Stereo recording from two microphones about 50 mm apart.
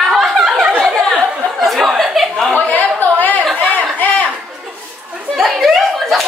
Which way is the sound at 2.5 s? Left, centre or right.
Left.